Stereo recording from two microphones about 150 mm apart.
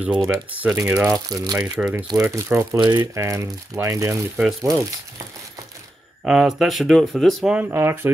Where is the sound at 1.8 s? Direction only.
10° right (ahead or behind).